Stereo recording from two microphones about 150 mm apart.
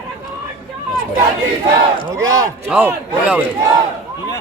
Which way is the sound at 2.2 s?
20° right (ahead or behind).